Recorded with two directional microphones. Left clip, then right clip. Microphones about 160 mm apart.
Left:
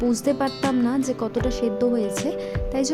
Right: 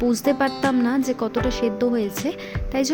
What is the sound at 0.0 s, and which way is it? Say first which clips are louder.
Speech: right 2 dB; 15° right (ahead or behind).